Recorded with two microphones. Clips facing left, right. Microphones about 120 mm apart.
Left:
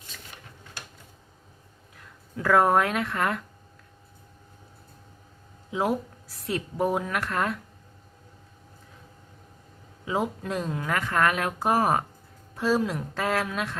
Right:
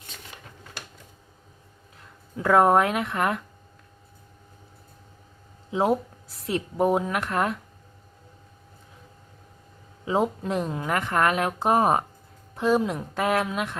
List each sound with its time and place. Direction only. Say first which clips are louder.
2.3 s speech: right 2 dB; 25° right (ahead or behind)
5.7 s speech: right 3 dB; 25° right (ahead or behind)
10.1 s speech: right 4 dB; 25° right (ahead or behind)